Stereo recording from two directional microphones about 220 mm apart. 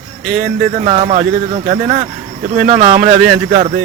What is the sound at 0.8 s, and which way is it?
Speech, 30° right (ahead or behind).